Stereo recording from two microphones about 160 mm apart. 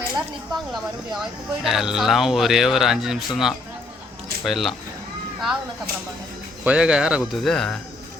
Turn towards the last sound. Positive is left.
turn(degrees=5)  # may be behind; listen again after turning